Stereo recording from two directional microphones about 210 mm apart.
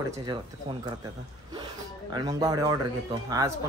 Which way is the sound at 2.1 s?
15° right (ahead or behind).